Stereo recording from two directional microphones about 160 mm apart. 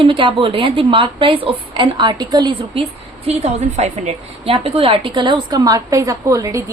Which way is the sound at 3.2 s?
45° right (ahead or behind).